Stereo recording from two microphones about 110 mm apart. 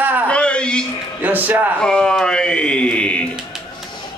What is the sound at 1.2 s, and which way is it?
Speech, 15° right (ahead or behind).